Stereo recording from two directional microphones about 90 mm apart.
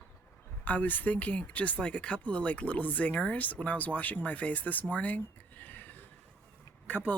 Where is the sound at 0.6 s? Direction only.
20° left (ahead or behind).